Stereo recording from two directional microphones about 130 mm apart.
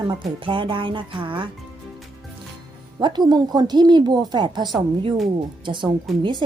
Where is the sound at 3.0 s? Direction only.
35° right (ahead or behind).